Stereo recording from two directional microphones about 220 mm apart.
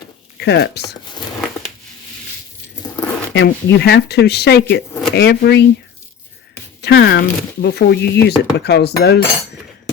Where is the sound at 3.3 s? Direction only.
45° left (ahead or behind).